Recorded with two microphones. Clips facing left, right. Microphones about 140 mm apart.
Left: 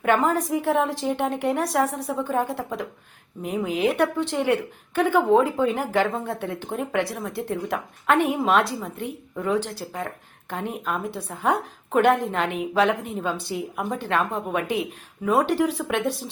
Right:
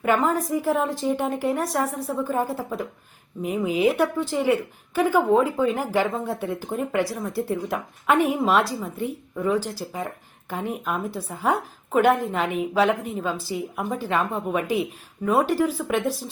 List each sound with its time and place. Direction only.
0.0 s a woman's voice: centre (ahead or behind)